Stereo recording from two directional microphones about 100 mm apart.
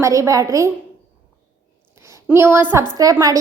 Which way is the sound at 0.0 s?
30° right (ahead or behind).